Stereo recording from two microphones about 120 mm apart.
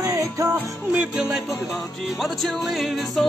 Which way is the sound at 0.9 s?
10° right (ahead or behind).